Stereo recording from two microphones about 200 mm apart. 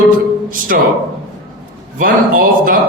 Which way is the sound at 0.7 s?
45° right (ahead or behind).